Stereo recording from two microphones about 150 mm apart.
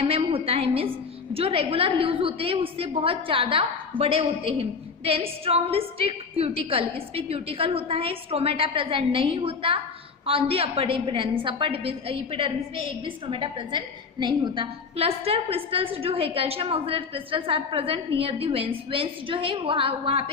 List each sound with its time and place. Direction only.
0.0 s a woman's voice: 40° right (ahead or behind)